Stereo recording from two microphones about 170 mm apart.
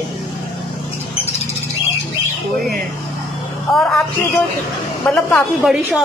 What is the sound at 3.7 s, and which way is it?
A woman's voice, 5° left (ahead or behind).